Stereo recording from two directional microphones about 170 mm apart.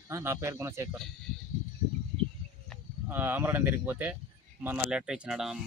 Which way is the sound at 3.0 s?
10° right (ahead or behind).